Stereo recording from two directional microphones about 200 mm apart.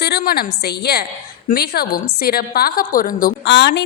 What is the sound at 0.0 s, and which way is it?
A woman's voice, 50° left (ahead or behind).